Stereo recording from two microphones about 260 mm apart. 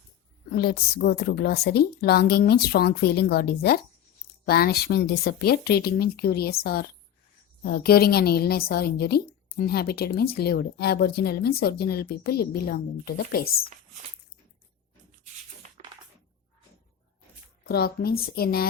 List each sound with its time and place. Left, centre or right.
0.5 s a woman's voice: left
15.8 s a sound: right
17.6 s a woman's voice: left